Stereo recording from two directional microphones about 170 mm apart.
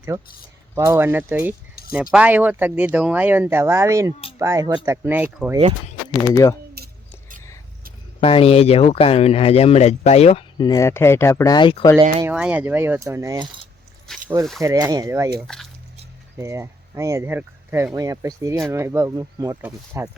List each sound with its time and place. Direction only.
0.8 s speech: 15° right (ahead or behind)
6.2 s speech: 20° left (ahead or behind)
6.7 s keys jangling: 60° right (ahead or behind)
8.2 s speech: 35° left (ahead or behind)
10.6 s speech: 20° left (ahead or behind)
12.3 s speech: 5° right (ahead or behind)
14.1 s a sound: 5° left (ahead or behind)
14.6 s speech: 20° right (ahead or behind)
15.4 s speech: 5° left (ahead or behind)
16.4 s speech: 15° right (ahead or behind)